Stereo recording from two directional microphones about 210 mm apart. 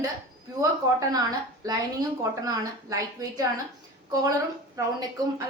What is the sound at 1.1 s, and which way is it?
A woman's voice, 15° right (ahead or behind).